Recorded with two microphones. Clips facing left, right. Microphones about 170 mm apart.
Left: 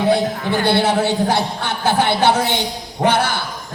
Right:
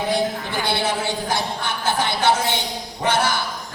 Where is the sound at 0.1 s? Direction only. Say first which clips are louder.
Left 5 dB; 60° left (ahead or behind).